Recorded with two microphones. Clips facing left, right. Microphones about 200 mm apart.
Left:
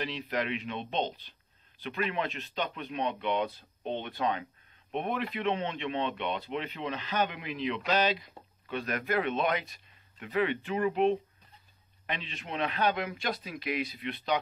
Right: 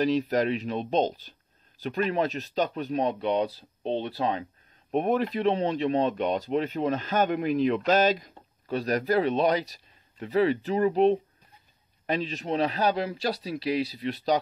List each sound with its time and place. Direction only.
0.0 s speech: 40° right (ahead or behind)